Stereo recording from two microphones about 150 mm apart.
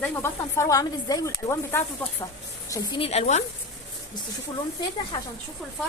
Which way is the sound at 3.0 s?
45° left (ahead or behind).